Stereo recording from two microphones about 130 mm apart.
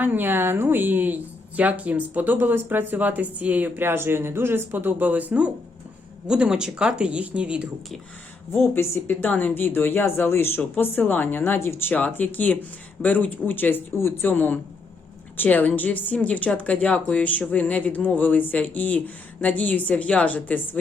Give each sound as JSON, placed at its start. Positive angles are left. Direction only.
{"t": 0.0, "sound": "speech", "side_deg": -15}
{"t": 8.5, "sound": "speech", "side_deg": 15}